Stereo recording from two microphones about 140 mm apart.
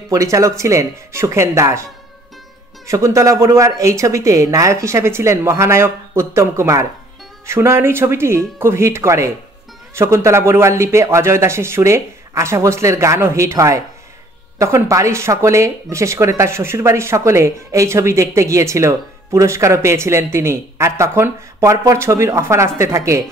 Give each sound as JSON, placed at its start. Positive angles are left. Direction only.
{"t": 0.1, "sound": "speech", "side_deg": -20}
{"t": 2.9, "sound": "speech", "side_deg": -20}